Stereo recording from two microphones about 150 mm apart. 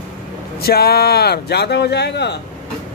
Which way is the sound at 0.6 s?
90° left.